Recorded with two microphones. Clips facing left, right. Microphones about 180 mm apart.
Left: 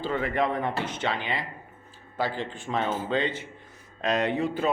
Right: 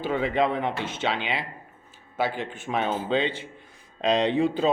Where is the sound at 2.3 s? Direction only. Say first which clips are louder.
Right 1 dB; 15° right (ahead or behind).